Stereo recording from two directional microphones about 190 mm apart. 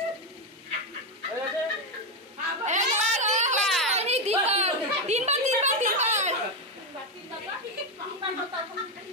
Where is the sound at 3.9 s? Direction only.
35° right (ahead or behind).